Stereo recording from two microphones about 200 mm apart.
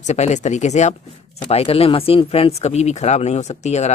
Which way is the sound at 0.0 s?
35° left (ahead or behind).